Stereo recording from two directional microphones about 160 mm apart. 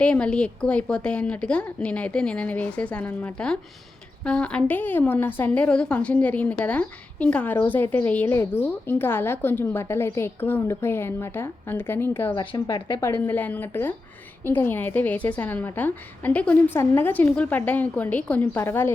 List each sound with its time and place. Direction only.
0.0 s a woman's voice: 5° left (ahead or behind)
12.3 s speech: 30° left (ahead or behind)
13.2 s a woman's voice: 10° left (ahead or behind)